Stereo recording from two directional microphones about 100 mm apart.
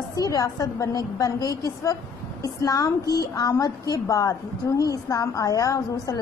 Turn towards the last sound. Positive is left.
turn(degrees=35)  # may be behind; listen again after turning